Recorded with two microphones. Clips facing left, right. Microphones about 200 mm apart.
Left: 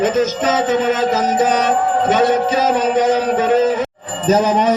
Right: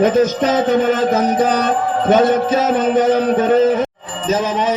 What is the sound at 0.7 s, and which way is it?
Music, 55° right (ahead or behind).